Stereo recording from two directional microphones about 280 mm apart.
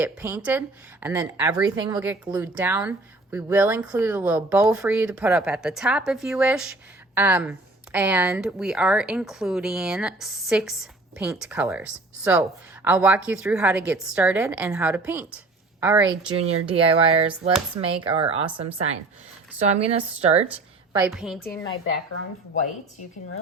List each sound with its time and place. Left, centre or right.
0.0 s a woman's voice: centre
16.4 s speech: centre
20.5 s a sound: centre
21.1 s speech: centre